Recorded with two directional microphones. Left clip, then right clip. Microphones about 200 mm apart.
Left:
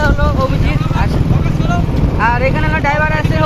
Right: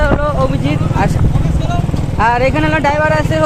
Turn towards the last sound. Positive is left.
turn(degrees=-55)  # may be behind; listen again after turning